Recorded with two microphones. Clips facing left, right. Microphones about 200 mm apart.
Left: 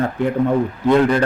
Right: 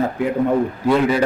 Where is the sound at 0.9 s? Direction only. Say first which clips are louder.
Left 2 dB; 5° right (ahead or behind).